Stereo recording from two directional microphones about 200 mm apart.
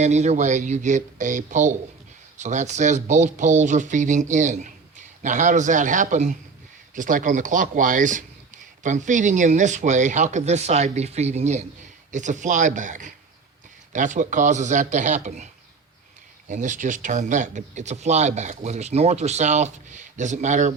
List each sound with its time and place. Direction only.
0.0 s speech: 35° right (ahead or behind)
16.5 s speech: 40° right (ahead or behind)